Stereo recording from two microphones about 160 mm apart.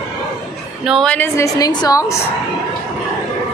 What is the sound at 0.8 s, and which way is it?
Speech, 5° right (ahead or behind).